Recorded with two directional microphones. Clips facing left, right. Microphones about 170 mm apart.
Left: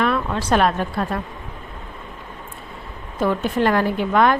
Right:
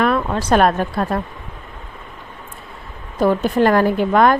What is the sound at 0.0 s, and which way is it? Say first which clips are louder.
Speech: right 3 dB; 40° right (ahead or behind).